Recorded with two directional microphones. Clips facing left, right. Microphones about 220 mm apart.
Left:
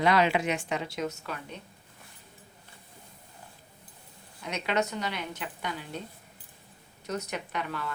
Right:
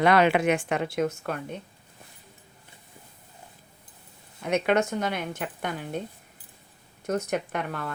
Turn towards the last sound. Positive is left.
turn(degrees=-50)  # may be behind; listen again after turning